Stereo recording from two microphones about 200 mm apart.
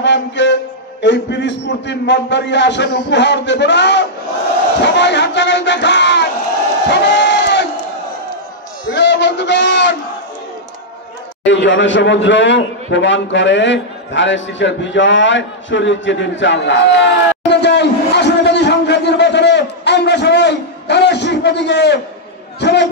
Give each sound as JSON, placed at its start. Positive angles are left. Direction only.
{"t": 0.0, "sound": "music", "side_deg": 60}
{"t": 1.0, "sound": "a man's voice", "side_deg": 60}
{"t": 6.9, "sound": "crowd", "side_deg": 60}
{"t": 8.8, "sound": "a man's voice", "side_deg": 60}
{"t": 11.4, "sound": "a man's voice", "side_deg": 65}